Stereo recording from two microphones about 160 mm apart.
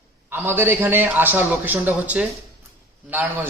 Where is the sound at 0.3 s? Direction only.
15° right (ahead or behind).